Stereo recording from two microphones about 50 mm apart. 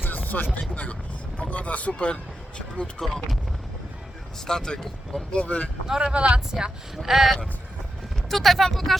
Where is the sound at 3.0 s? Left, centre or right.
Centre.